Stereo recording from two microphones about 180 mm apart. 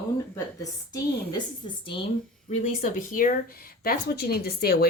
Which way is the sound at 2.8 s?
45° left (ahead or behind).